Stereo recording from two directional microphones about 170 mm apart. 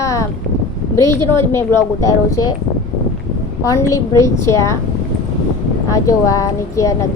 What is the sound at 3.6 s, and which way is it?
A woman's voice, 20° left (ahead or behind).